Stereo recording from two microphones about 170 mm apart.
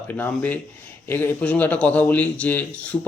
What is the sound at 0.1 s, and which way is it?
Speech, 10° left (ahead or behind).